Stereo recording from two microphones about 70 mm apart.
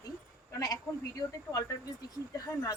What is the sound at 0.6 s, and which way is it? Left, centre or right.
A woman's voice, left.